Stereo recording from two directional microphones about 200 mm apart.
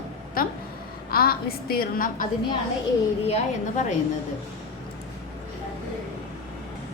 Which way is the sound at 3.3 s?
35° left (ahead or behind).